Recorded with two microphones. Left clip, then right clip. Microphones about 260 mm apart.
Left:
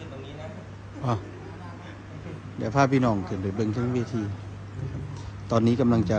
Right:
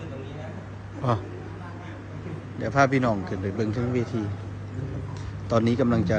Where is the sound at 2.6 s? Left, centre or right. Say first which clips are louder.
Right 1 dB; left.